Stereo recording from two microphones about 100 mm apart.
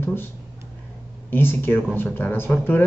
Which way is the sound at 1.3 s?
20° left (ahead or behind).